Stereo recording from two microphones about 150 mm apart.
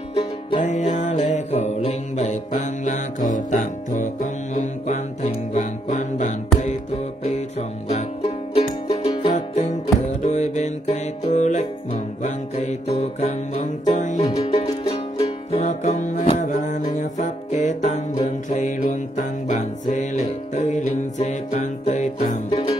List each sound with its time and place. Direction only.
0.1 s music: 40° left (ahead or behind)
9.3 s music: 55° left (ahead or behind)